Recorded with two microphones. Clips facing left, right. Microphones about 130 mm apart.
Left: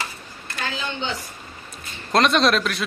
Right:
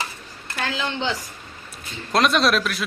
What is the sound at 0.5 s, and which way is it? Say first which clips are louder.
Speech: right 3 dB; 90° right.